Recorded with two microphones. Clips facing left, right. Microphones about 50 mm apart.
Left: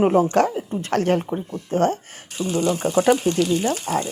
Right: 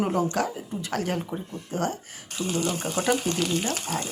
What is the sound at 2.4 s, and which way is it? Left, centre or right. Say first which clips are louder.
Speech: left 4 dB; left.